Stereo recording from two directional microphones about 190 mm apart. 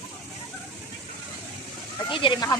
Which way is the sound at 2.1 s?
25° left (ahead or behind).